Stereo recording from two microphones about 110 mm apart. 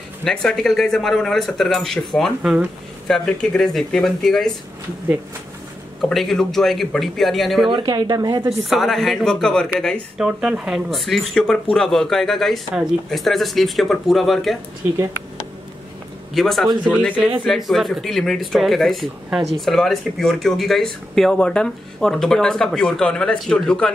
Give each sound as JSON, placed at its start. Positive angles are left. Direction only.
{"t": 0.2, "sound": "speech", "side_deg": 5}
{"t": 5.9, "sound": "speech", "side_deg": 5}
{"t": 7.7, "sound": "a woman's voice", "side_deg": -40}
{"t": 8.6, "sound": "speech", "side_deg": 0}
{"t": 10.1, "sound": "speech", "side_deg": -5}
{"t": 14.8, "sound": "speech", "side_deg": -20}
{"t": 16.3, "sound": "speech", "side_deg": 0}